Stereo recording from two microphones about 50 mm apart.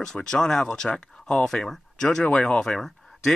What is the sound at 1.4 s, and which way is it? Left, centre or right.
Speech, centre.